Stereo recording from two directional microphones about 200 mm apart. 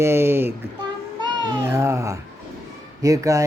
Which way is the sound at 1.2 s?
20° right (ahead or behind).